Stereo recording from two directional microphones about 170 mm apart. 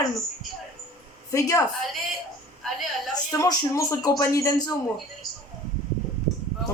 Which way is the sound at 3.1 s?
20° left (ahead or behind).